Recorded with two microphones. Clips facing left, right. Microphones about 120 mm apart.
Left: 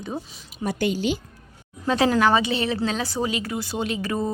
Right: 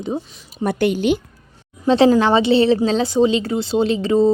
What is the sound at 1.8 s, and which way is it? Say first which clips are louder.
A woman's voice: right 6 dB; 25° right (ahead or behind).